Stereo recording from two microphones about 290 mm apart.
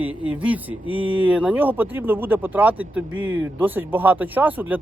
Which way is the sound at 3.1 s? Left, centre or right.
Right.